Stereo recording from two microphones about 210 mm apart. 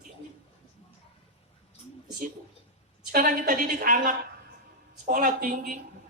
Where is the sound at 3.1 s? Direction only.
40° right (ahead or behind).